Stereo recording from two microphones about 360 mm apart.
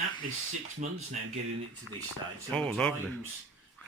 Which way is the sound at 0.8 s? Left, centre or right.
Centre.